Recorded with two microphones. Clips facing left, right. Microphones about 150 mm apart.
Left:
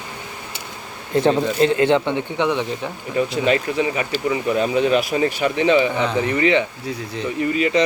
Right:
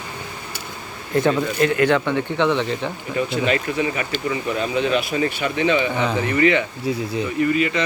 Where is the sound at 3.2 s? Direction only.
35° left (ahead or behind).